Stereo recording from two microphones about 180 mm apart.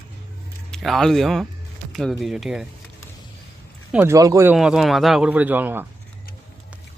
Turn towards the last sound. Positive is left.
turn(degrees=-10)  # may be behind; listen again after turning